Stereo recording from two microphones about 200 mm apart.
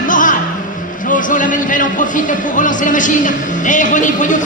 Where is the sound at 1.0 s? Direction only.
40° left (ahead or behind).